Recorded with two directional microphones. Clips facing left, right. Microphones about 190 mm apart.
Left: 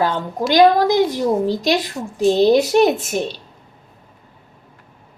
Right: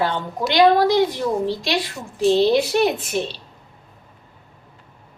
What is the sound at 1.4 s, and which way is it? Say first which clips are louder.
Speech: left 4 dB; 45° left (ahead or behind).